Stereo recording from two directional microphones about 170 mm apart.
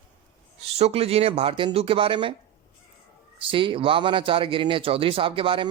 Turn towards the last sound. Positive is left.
turn(degrees=-30)  # may be behind; listen again after turning